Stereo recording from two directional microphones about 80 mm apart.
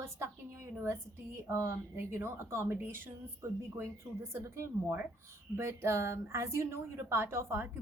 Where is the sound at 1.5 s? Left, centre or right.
Right.